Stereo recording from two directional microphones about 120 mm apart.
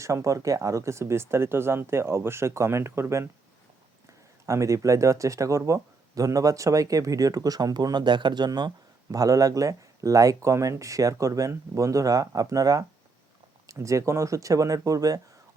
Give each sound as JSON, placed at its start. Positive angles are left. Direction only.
{"t": 0.0, "sound": "speech", "side_deg": -25}
{"t": 4.4, "sound": "speech", "side_deg": -25}